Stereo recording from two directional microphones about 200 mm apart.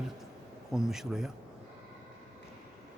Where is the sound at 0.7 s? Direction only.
Centre (ahead or behind).